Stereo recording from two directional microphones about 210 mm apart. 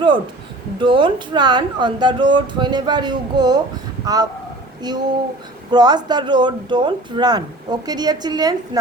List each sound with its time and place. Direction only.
0.8 s speech: 20° right (ahead or behind)